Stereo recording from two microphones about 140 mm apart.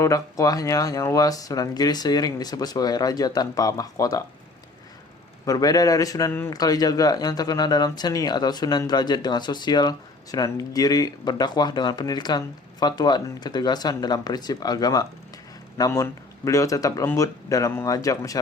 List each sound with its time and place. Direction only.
0.0 s speech: 25° left (ahead or behind)
5.5 s speech: 25° left (ahead or behind)